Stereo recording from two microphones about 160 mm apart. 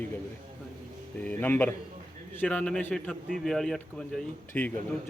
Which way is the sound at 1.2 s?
10° left (ahead or behind).